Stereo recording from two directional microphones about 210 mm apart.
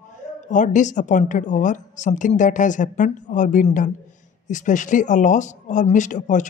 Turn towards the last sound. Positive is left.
turn(degrees=35)  # may be behind; listen again after turning